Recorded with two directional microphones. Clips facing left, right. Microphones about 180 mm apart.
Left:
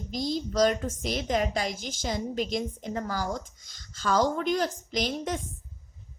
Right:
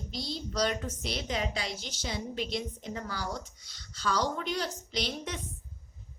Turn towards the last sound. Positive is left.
turn(degrees=45)  # may be behind; listen again after turning